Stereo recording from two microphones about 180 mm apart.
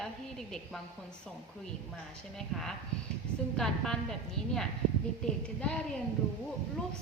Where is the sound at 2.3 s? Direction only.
5° left (ahead or behind).